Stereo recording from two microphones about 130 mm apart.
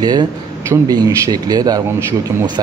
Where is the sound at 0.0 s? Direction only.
30° right (ahead or behind).